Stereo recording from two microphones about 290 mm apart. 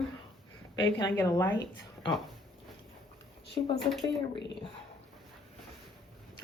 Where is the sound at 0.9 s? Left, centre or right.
Centre.